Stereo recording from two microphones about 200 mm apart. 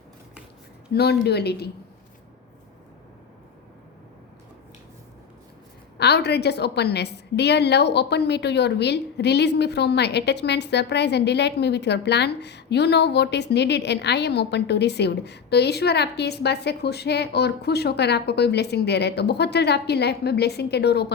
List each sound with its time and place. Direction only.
0.9 s a woman's voice: 55° left (ahead or behind)
6.0 s a woman's voice: 55° left (ahead or behind)